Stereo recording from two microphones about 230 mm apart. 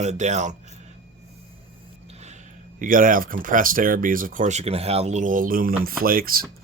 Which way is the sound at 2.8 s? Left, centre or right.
Right.